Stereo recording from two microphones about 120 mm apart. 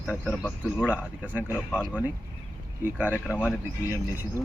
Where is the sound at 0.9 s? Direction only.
15° right (ahead or behind).